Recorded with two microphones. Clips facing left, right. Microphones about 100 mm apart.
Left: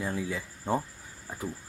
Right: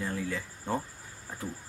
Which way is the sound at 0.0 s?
15° left (ahead or behind).